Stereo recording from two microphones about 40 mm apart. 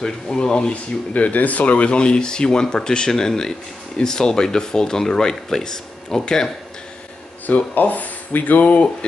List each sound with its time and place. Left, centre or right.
0.0 s speech: centre
1.1 s speech: left; by 6.5 s centre
7.4 s speech: left